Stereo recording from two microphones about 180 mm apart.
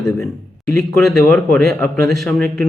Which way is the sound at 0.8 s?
Centre (ahead or behind).